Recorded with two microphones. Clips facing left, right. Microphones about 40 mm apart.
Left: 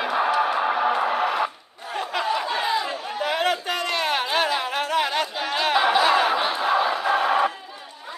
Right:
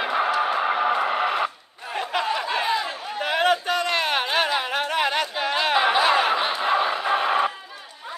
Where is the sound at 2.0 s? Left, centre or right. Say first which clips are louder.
Even; right.